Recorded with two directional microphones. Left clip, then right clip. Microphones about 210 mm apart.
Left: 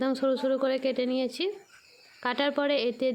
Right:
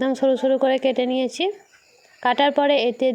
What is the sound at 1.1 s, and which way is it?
Speech, 25° left (ahead or behind).